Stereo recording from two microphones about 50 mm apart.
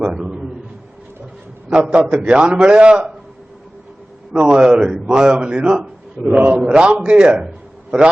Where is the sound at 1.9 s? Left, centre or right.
Centre.